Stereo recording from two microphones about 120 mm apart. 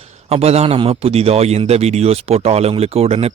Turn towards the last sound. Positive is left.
turn(degrees=-55)  # may be behind; listen again after turning